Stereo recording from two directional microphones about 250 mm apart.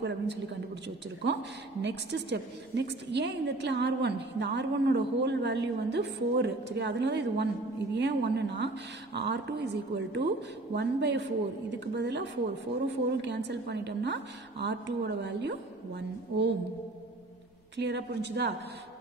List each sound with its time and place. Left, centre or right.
0.8 s a woman's voice: right
17.7 s a woman's voice: right